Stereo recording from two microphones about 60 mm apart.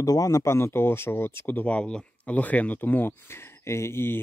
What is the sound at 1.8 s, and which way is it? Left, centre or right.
Speech, centre.